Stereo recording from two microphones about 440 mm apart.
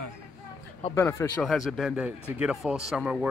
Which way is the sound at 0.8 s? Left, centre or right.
Centre.